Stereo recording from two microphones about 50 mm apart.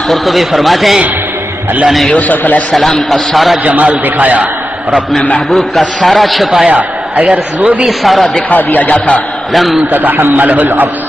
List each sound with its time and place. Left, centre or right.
0.1 s a man's voice: centre
2.0 s speech: left
2.7 s a man's voice: centre
3.6 s a man's voice: right
5.5 s a man's voice: centre
6.7 s a man's voice: right
7.8 s a man's voice: centre
8.5 s speech: left
9.5 s a man's voice: centre
9.8 s a man's voice: right